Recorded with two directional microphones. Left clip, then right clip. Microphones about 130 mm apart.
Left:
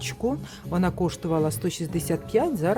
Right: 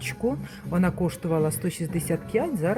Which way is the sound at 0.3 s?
15° left (ahead or behind).